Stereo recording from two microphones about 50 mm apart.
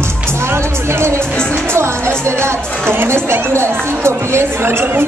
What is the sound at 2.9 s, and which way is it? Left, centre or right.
Speech, right.